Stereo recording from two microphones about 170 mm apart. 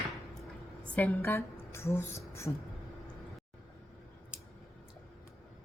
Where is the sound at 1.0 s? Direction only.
15° left (ahead or behind).